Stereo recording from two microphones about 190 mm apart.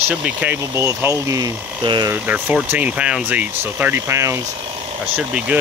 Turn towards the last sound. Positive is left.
turn(degrees=-5)  # may be behind; listen again after turning